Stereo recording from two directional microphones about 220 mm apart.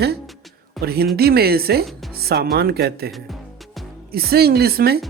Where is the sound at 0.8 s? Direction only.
45° right (ahead or behind).